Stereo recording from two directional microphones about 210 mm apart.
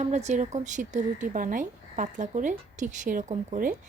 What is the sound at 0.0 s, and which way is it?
Speech, 35° right (ahead or behind).